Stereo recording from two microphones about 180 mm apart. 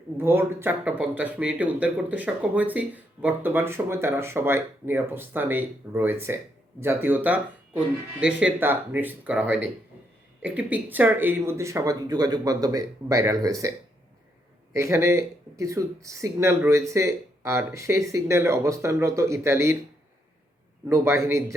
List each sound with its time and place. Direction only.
0.2 s speech: 10° right (ahead or behind)
20.9 s speech: 15° right (ahead or behind)